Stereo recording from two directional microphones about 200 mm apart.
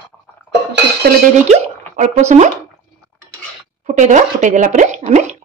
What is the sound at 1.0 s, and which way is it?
Speech, 55° right (ahead or behind).